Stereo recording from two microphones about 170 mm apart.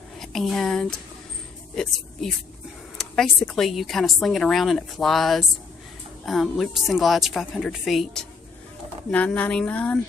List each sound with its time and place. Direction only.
0.2 s speech: centre (ahead or behind)